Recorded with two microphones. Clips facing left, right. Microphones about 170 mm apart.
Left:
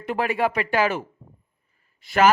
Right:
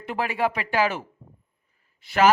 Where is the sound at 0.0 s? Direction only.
50° left (ahead or behind).